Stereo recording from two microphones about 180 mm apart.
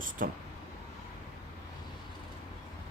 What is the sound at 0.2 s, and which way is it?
Speech, 50° right (ahead or behind).